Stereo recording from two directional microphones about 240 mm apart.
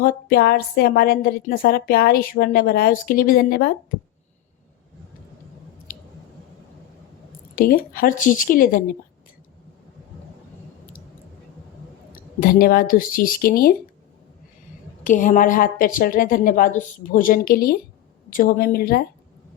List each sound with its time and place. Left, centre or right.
0.0 s a woman's voice: left
5.9 s a sound: left
7.5 s a woman's voice: left
12.1 s a woman's voice: left
15.0 s a woman's voice: left